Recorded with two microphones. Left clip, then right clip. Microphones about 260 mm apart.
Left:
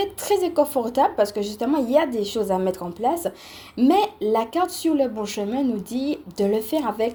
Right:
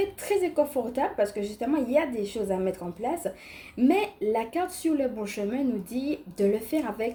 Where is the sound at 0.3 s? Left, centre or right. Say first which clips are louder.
Left 6 dB; left.